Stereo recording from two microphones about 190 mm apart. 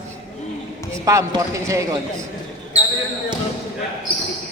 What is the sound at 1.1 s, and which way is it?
Speech, 15° right (ahead or behind).